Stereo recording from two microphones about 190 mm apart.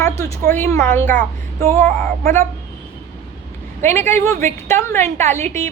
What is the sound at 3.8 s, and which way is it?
A woman's voice, 10° left (ahead or behind).